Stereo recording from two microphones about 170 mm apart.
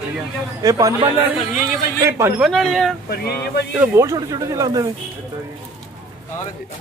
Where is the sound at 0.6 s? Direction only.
20° right (ahead or behind).